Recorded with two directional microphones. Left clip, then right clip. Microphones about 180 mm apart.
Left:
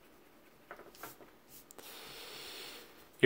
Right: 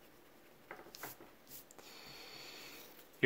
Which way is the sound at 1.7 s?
35° left (ahead or behind).